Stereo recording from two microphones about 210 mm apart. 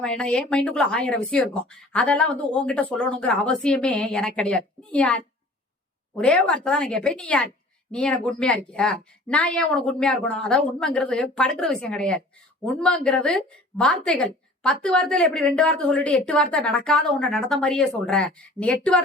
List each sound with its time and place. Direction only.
0.0 s a woman's voice: 5° left (ahead or behind)